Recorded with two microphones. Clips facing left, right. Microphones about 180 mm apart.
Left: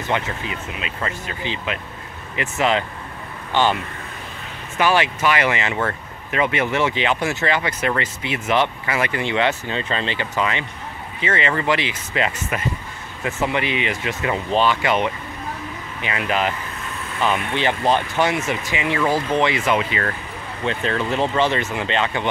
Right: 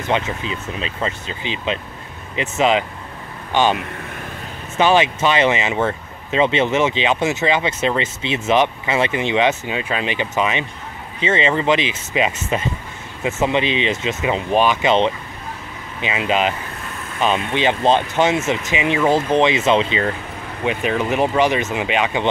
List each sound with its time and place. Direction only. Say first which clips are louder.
0.1 s speech: right 3 dB; 25° right (ahead or behind)